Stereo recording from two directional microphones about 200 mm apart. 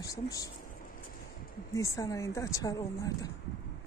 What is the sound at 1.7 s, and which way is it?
A woman's voice, 15° left (ahead or behind).